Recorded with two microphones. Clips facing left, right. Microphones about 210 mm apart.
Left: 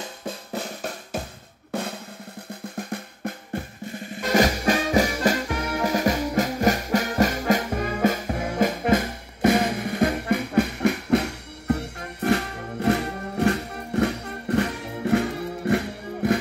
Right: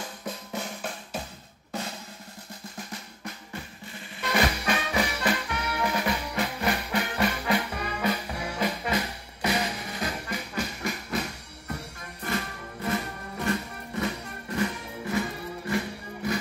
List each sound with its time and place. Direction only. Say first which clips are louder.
0.2 s drum: left 4 dB; 35° left (ahead or behind)
1.7 s drum: left 6 dB; 55° left (ahead or behind)
4.2 s music: left 6 dB; 40° left (ahead or behind); by 16.3 s 60° left (ahead or behind)